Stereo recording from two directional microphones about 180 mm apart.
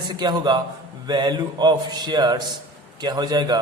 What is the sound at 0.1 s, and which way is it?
A man's voice, 25° right (ahead or behind).